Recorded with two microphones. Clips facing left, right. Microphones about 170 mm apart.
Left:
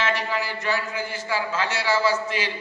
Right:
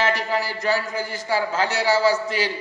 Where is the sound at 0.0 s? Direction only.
40° right (ahead or behind).